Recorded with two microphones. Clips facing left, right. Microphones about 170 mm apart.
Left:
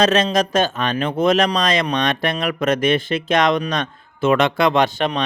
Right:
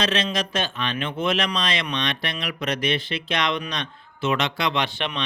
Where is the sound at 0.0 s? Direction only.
45° left (ahead or behind).